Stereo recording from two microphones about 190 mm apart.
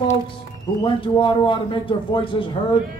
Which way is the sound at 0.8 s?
25° left (ahead or behind).